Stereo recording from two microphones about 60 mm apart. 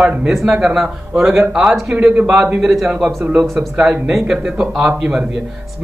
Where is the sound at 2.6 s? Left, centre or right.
Centre.